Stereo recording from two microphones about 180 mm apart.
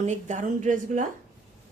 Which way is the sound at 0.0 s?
40° right (ahead or behind).